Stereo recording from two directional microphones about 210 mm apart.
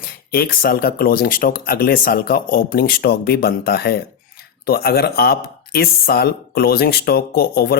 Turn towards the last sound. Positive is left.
turn(degrees=45)  # may be behind; listen again after turning